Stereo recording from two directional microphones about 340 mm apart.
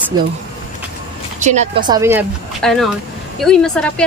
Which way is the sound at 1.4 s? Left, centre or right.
Right.